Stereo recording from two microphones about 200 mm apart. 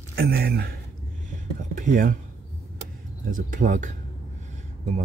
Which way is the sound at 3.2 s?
40° right (ahead or behind).